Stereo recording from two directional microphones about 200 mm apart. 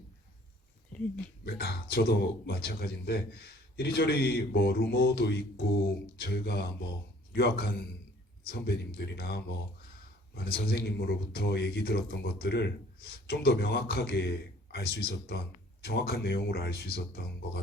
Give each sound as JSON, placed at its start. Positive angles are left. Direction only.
{"t": 1.5, "sound": "speech", "side_deg": 50}